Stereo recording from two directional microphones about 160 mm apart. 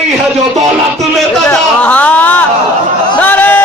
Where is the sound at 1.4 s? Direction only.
5° left (ahead or behind).